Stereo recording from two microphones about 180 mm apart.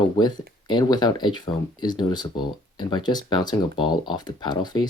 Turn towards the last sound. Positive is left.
turn(degrees=25)  # may be behind; listen again after turning